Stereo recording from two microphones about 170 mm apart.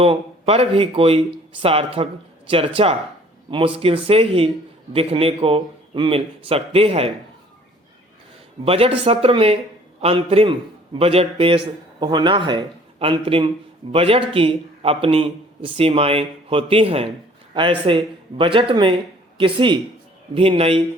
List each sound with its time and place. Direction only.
0.0 s a man's voice: 35° right (ahead or behind)
8.6 s a man's voice: 35° right (ahead or behind)